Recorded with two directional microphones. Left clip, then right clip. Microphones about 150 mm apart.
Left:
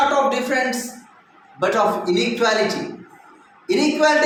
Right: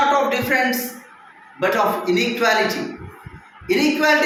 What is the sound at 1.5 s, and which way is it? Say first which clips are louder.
A man's voice: even; 45° left (ahead or behind).